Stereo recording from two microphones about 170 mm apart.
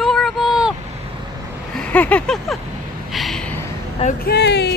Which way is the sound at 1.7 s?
10° left (ahead or behind).